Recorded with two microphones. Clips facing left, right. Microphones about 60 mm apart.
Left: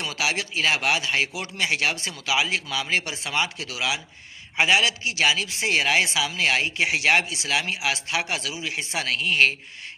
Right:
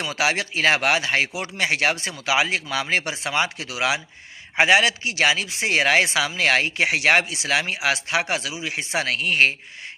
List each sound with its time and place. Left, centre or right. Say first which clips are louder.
0.0 s a man's voice: right 4 dB; right